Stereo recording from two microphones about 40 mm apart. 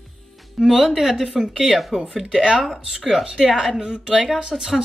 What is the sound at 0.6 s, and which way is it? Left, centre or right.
Speech, centre.